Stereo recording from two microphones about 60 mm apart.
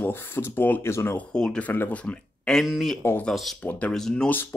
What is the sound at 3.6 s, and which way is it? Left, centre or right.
Speech, left.